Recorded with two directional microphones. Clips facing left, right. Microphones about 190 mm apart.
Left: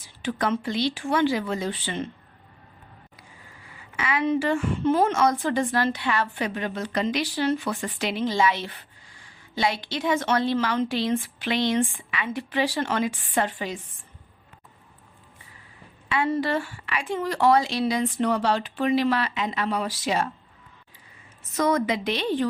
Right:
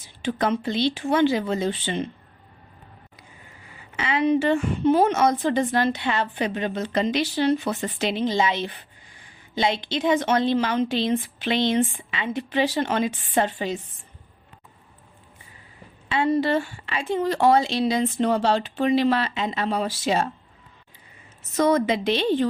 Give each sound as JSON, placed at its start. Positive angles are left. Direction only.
{"t": 0.0, "sound": "a woman's voice", "side_deg": -25}
{"t": 3.7, "sound": "a woman's voice", "side_deg": -25}
{"t": 16.0, "sound": "a woman's voice", "side_deg": -25}
{"t": 21.5, "sound": "a woman's voice", "side_deg": -30}